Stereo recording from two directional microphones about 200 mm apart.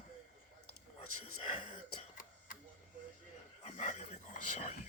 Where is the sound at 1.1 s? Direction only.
90° left.